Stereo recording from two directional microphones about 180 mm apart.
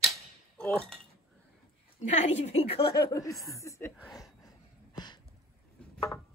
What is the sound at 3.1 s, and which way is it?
Speech, 20° left (ahead or behind).